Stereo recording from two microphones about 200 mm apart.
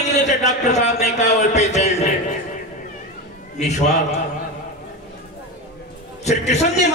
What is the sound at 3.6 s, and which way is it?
Speech, 35° left (ahead or behind).